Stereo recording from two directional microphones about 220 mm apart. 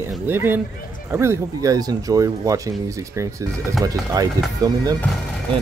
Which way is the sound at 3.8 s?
15° right (ahead or behind).